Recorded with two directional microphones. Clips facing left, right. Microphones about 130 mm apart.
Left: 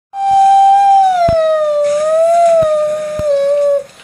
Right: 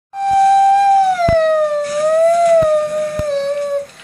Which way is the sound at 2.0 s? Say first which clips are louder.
Left 1 dB; 10° left (ahead or behind).